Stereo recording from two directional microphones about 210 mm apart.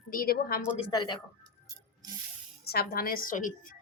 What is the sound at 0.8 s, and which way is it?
Speech, 20° left (ahead or behind).